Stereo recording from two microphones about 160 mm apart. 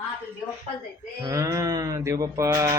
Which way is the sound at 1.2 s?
20° right (ahead or behind).